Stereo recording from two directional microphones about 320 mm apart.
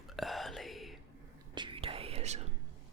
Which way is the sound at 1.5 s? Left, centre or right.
Centre.